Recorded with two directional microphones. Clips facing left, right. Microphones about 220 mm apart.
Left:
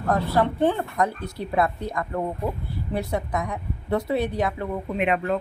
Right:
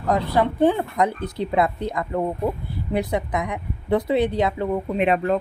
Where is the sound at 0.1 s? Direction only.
15° right (ahead or behind).